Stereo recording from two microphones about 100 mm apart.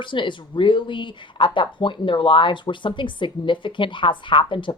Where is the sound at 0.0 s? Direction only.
55° left (ahead or behind).